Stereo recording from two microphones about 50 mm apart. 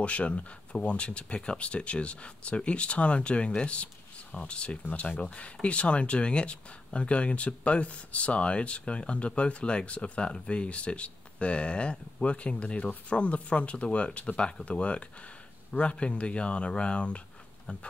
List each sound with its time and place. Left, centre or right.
0.0 s speech: left
4.8 s speech: left